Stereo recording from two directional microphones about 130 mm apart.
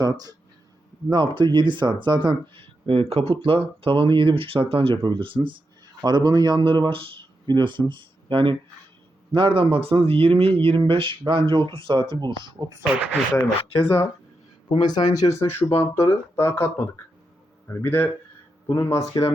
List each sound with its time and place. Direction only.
0.0 s speech: 30° right (ahead or behind)
12.8 s speech: 5° right (ahead or behind)
14.7 s a man's voice: 35° left (ahead or behind)